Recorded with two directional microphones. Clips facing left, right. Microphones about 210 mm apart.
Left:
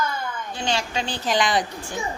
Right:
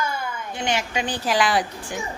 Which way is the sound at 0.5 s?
20° right (ahead or behind).